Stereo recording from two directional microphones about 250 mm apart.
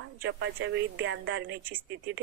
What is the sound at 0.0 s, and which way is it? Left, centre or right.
A woman's voice, right.